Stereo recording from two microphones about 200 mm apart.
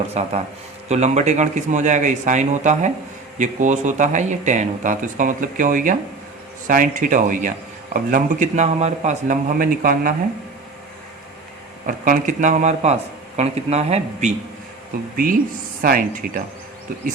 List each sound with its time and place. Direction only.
0.1 s speech: 35° right (ahead or behind)
11.9 s speech: 40° right (ahead or behind)